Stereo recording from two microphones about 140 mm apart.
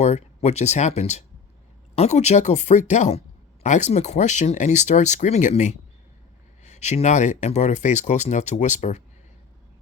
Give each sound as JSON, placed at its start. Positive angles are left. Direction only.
{"t": 0.0, "sound": "speech", "side_deg": 55}